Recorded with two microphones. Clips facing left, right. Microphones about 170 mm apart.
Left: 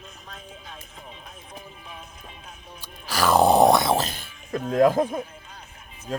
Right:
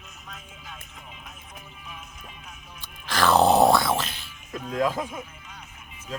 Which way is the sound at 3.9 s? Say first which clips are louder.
Left 4 dB; 45° left (ahead or behind).